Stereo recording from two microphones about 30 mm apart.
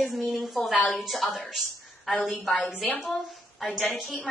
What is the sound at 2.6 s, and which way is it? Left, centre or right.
Speech, left.